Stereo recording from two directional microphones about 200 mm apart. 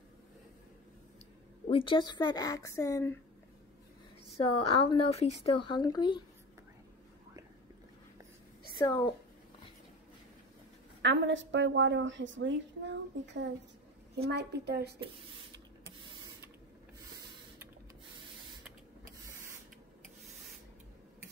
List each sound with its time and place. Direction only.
1.7 s speech: 25° left (ahead or behind)
4.8 s speech: 30° left (ahead or behind)
8.8 s speech: 25° left (ahead or behind)
11.0 s a woman's voice: 65° right (ahead or behind)